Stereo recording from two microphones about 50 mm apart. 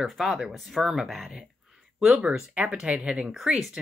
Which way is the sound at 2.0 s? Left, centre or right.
Centre.